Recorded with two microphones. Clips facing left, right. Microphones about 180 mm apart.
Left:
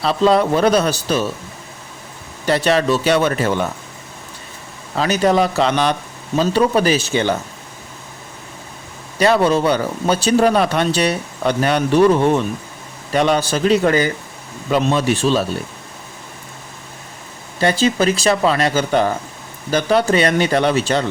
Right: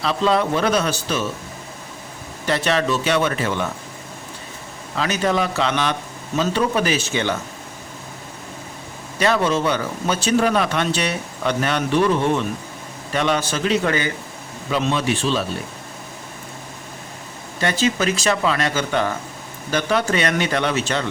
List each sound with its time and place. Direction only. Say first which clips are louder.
0.0 s speech: left 4 dB; 35° left (ahead or behind)
2.5 s speech: left 4 dB; 35° left (ahead or behind)
4.9 s speech: left 5 dB; 40° left (ahead or behind)
9.1 s speech: left 5 dB; 35° left (ahead or behind)
17.6 s speech: left 4 dB; 35° left (ahead or behind)